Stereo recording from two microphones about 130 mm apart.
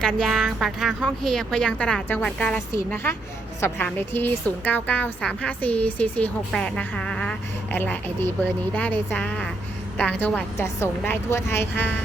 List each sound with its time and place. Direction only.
0.0 s a woman's voice: 5° left (ahead or behind)
7.8 s a woman's voice: 15° left (ahead or behind)